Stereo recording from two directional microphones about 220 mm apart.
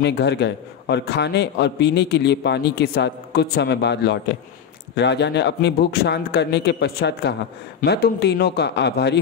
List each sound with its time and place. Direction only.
0.0 s a man's voice: 50° left (ahead or behind)